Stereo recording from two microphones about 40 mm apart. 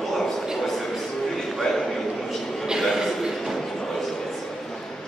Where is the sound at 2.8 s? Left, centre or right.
Centre.